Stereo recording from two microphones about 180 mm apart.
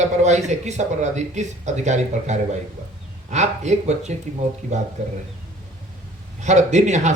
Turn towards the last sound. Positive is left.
turn(degrees=-40)  # may be behind; listen again after turning